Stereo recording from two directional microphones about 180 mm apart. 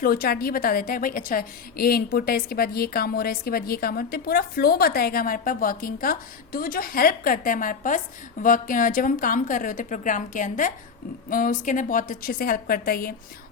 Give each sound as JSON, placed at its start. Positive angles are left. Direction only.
{"t": 0.0, "sound": "a woman's voice", "side_deg": 55}